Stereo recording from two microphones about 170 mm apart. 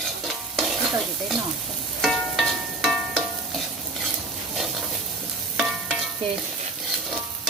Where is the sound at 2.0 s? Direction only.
Centre (ahead or behind).